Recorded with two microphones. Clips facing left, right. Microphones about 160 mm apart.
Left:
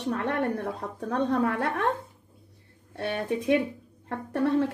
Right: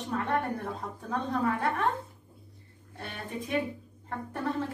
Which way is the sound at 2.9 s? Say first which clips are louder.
Left 9 dB; 75° left (ahead or behind).